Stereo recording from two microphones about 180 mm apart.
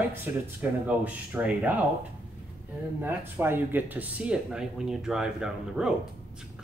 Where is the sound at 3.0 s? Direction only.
10° right (ahead or behind).